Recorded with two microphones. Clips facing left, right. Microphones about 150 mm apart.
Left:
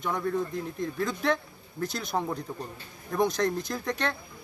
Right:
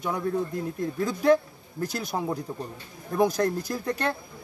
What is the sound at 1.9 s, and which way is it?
Speech, 10° right (ahead or behind).